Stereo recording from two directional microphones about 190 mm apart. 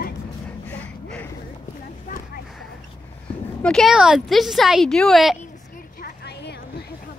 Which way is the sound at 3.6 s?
5° left (ahead or behind).